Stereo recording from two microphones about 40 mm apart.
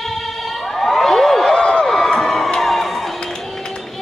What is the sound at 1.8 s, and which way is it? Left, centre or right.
Crowd, centre.